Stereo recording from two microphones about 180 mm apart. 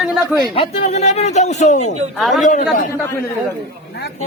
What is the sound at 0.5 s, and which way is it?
A man's voice, 35° left (ahead or behind).